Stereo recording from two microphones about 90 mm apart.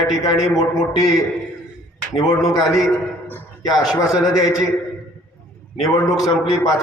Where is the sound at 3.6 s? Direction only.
45° left (ahead or behind).